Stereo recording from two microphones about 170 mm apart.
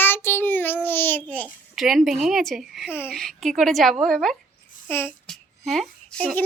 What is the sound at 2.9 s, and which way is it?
Child singing, 15° left (ahead or behind).